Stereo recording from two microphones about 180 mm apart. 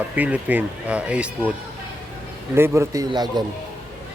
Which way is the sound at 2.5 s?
15° right (ahead or behind).